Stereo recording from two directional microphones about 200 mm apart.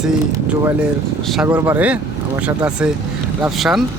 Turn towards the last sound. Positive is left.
turn(degrees=0)  # may be behind; listen again after turning